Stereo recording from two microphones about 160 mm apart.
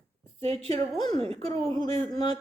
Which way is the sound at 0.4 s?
40° right (ahead or behind).